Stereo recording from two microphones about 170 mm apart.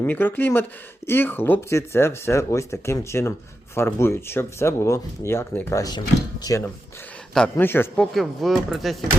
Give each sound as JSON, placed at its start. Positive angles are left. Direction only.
{"t": 0.0, "sound": "speech", "side_deg": 10}
{"t": 8.1, "sound": "speech", "side_deg": 0}